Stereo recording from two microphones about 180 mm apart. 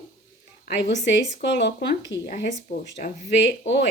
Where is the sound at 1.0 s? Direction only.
70° left (ahead or behind).